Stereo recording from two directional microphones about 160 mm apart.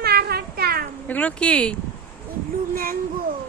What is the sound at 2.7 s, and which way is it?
Speech, 65° right (ahead or behind).